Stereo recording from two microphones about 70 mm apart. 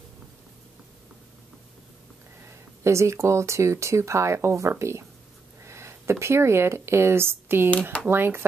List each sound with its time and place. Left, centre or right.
2.8 s speech: right